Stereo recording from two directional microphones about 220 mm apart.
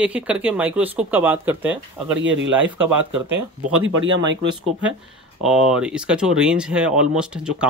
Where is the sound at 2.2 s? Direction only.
60° right (ahead or behind).